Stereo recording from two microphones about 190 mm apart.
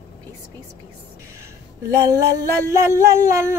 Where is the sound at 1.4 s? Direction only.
15° right (ahead or behind).